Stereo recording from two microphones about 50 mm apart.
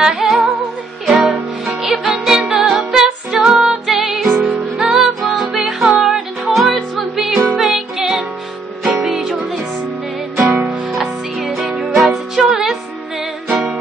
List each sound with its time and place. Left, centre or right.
0.0 s music: centre
11.0 s music: centre